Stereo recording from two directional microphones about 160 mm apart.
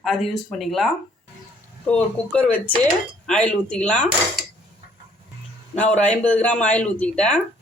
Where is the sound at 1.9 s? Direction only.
5° left (ahead or behind).